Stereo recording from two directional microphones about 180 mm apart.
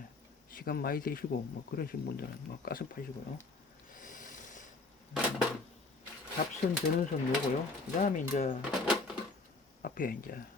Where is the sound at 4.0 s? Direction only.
45° left (ahead or behind).